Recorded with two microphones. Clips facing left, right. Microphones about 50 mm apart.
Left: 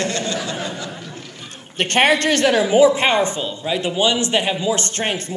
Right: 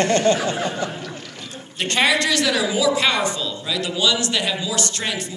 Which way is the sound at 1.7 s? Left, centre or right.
Left.